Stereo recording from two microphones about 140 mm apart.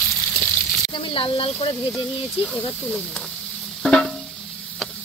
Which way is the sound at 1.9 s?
Centre (ahead or behind).